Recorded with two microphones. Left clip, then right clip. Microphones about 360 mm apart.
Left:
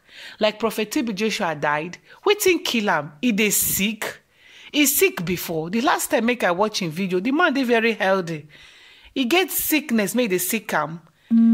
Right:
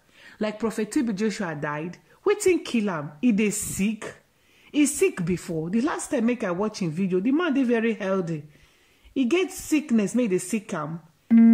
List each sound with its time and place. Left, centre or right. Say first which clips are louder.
0.2 s speech: left 7 dB; centre